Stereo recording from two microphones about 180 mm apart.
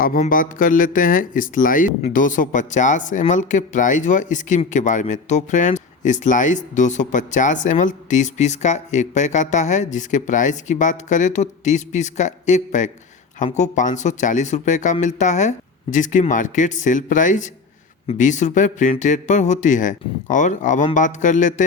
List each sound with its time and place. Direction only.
0.0 s speech: 50° left (ahead or behind)